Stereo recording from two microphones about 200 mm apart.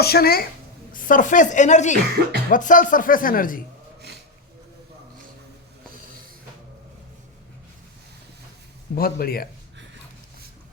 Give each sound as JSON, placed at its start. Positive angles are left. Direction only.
{"t": 0.0, "sound": "speech", "side_deg": 50}
{"t": 2.0, "sound": "speech", "side_deg": -55}
{"t": 2.5, "sound": "speech", "side_deg": 40}
{"t": 9.0, "sound": "speech", "side_deg": 45}